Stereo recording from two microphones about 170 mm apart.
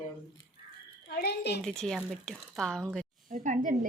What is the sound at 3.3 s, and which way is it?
Speech, 50° right (ahead or behind).